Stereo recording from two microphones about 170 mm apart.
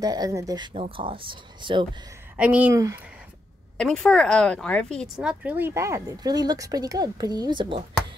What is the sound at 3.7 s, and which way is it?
A woman's voice, 5° left (ahead or behind).